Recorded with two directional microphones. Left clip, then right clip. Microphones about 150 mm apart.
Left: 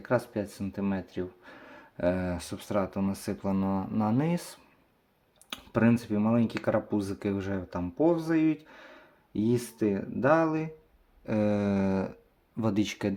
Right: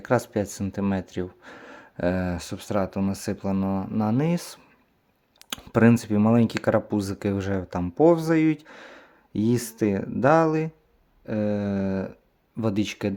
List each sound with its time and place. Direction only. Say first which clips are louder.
0.0 s speech: right 5 dB; 50° right (ahead or behind)
5.5 s speech: right 7 dB; 50° right (ahead or behind)
11.3 s a sound: right 1 dB; 10° right (ahead or behind)
12.5 s speech: right 3 dB; 25° right (ahead or behind)